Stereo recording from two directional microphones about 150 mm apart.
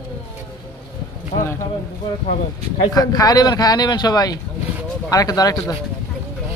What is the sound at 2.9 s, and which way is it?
Speech, 25° left (ahead or behind).